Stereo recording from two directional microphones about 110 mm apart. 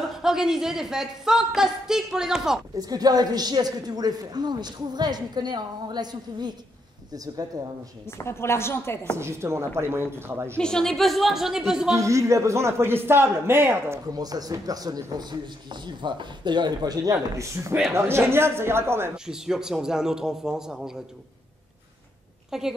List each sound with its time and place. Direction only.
0.1 s a woman's voice: 5° right (ahead or behind)
2.8 s a woman's voice: 35° right (ahead or behind)
8.2 s a woman's voice: 25° left (ahead or behind)
9.1 s a man's voice: 25° right (ahead or behind)
10.6 s a woman's voice: 5° left (ahead or behind)
11.9 s a man's voice: 30° right (ahead or behind)
14.1 s a woman's voice: 35° right (ahead or behind)
19.1 s a woman's voice: 5° right (ahead or behind)
22.5 s a woman's voice: 5° right (ahead or behind)